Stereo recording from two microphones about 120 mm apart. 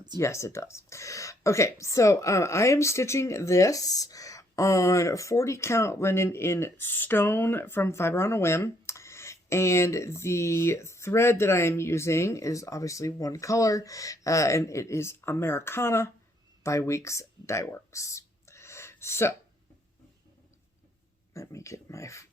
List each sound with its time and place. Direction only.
0.2 s speech: 25° left (ahead or behind)
21.3 s speech: 25° left (ahead or behind)